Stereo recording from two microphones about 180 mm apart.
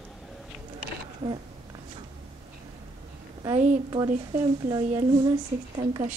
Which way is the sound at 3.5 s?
45° right (ahead or behind).